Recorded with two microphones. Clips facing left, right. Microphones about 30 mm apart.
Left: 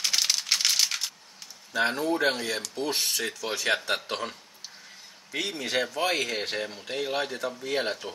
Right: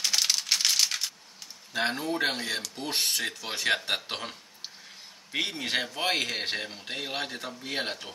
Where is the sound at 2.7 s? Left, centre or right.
Right.